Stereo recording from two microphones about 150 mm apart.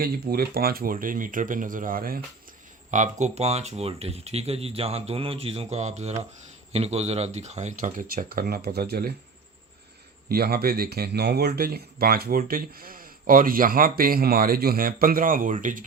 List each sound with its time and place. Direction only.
0.0 s speech: 90° right; by 2.2 s 75° right (ahead or behind)
2.9 s speech: 55° right (ahead or behind); by 9.1 s 90° right
10.2 s speech: 90° right; by 15.8 s 60° right (ahead or behind)